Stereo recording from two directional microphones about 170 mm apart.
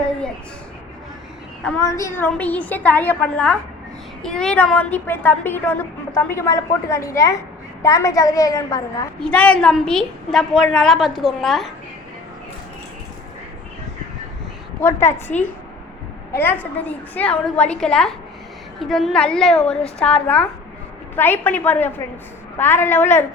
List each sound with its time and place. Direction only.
1.8 s a woman's voice: 20° left (ahead or behind)
9.2 s a woman's voice: 5° left (ahead or behind)
14.8 s a woman's voice: 15° left (ahead or behind)
16.3 s a woman's voice: 10° left (ahead or behind)